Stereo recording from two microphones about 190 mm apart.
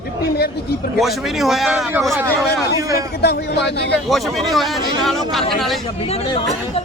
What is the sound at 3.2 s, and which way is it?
Speech, 60° left (ahead or behind).